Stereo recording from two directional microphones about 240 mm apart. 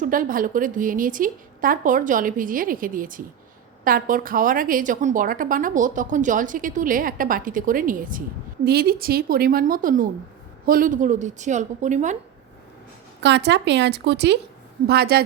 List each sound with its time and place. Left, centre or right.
0.0 s a woman's voice: right
13.2 s a woman's voice: right